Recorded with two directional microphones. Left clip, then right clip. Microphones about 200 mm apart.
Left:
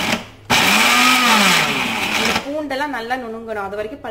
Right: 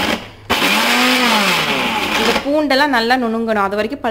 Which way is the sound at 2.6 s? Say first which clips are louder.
Right 9 dB; 50° right (ahead or behind).